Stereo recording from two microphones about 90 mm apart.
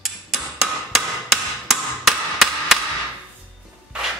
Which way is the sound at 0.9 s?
Centre (ahead or behind).